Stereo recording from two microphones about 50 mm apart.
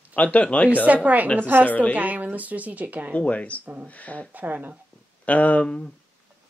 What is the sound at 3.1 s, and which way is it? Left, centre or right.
Speech, left.